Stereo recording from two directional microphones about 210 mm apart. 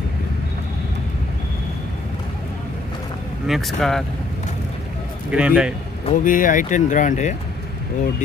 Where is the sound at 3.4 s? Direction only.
Centre (ahead or behind).